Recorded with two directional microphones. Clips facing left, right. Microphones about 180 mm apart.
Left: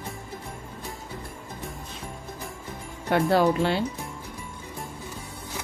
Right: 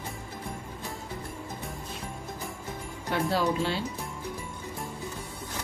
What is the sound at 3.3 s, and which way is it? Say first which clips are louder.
Speech: left 6 dB; 60° left (ahead or behind).